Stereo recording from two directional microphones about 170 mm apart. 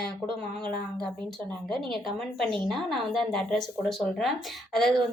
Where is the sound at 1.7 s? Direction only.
Centre (ahead or behind).